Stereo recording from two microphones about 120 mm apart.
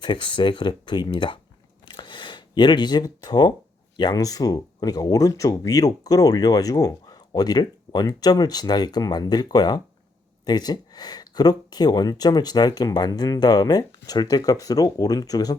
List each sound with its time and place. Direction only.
0.0 s speech: 40° left (ahead or behind)
1.8 s a sound: 40° left (ahead or behind)
3.9 s speech: 35° left (ahead or behind)